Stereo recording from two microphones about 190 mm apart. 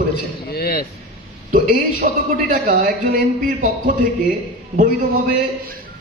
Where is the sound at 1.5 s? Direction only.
45° right (ahead or behind).